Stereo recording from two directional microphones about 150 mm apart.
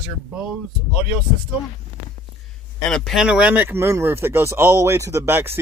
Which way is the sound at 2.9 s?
Centre (ahead or behind).